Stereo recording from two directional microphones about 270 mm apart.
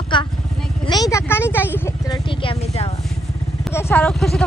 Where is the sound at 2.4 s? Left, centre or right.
Centre.